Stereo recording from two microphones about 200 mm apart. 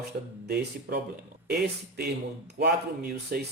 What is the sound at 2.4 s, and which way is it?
Speech, 55° right (ahead or behind).